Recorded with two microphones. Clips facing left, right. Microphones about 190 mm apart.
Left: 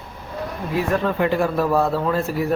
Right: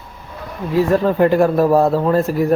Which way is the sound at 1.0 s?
45° right (ahead or behind).